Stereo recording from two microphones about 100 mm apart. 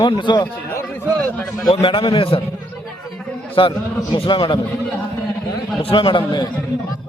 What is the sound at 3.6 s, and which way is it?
A man's voice, 55° left (ahead or behind).